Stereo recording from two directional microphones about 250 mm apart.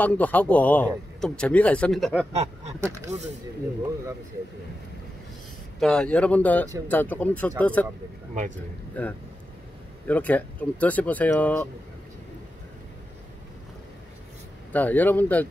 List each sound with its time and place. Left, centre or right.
0.0 s speech: centre
2.3 s a sound: right
2.8 s speech: centre
5.8 s speech: centre
9.0 s speech: centre
14.7 s speech: centre